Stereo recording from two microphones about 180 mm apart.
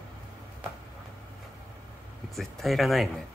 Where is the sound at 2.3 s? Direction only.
Centre (ahead or behind).